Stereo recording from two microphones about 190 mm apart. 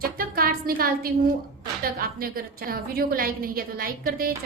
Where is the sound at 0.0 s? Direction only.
50° right (ahead or behind).